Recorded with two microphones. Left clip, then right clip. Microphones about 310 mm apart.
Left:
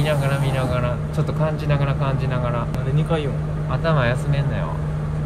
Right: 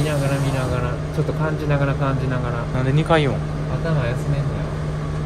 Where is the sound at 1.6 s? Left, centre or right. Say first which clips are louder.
Right 2 dB; centre.